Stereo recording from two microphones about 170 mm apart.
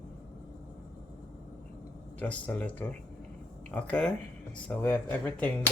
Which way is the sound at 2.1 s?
10° left (ahead or behind).